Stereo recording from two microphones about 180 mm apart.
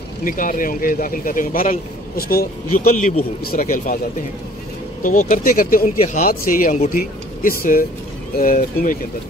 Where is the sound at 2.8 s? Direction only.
40° left (ahead or behind).